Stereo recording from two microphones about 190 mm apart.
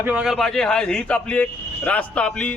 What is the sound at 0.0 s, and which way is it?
A man's voice, 5° right (ahead or behind).